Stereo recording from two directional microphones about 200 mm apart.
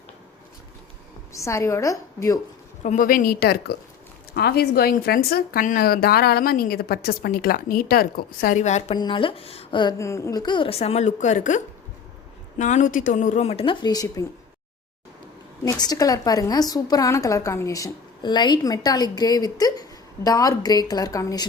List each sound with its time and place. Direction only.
1.3 s a woman's voice: 15° left (ahead or behind)
2.8 s a woman's voice: 40° left (ahead or behind)
9.0 s a woman's voice: 25° left (ahead or behind)
15.6 s a woman's voice: 20° left (ahead or behind)